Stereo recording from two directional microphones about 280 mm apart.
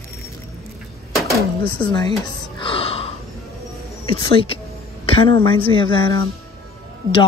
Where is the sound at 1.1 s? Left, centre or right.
Centre.